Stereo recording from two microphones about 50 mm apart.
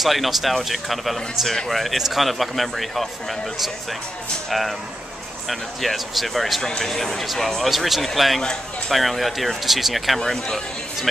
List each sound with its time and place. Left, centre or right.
0.0 s a man's voice: centre
6.6 s a man's voice: centre
8.4 s speech: centre
8.9 s a man's voice: centre